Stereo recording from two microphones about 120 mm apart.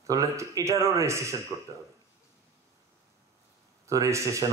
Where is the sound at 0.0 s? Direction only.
25° right (ahead or behind).